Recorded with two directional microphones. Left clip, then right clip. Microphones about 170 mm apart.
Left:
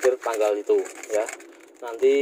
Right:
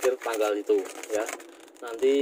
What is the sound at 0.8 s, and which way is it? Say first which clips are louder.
Speech: left 4 dB; 15° right (ahead or behind).